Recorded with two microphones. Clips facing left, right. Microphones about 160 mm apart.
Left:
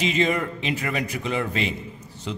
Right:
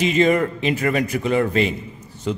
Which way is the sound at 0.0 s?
50° right (ahead or behind).